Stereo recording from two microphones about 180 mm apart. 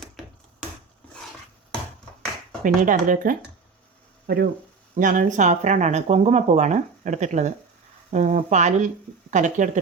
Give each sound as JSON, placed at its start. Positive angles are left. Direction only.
{"t": 2.6, "sound": "speech", "side_deg": -50}
{"t": 4.9, "sound": "speech", "side_deg": -45}